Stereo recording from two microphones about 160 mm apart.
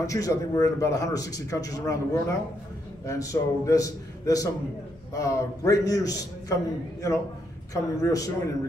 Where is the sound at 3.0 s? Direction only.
20° left (ahead or behind).